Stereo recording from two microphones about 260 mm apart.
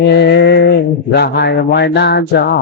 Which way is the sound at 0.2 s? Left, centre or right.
Left.